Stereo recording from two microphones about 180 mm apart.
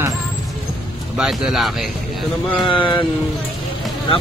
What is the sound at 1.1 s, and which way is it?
Speech, 5° right (ahead or behind).